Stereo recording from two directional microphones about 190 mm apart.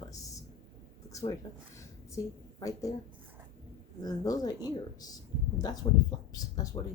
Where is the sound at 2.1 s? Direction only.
15° left (ahead or behind).